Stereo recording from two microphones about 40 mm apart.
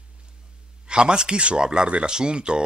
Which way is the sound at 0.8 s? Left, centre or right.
Right.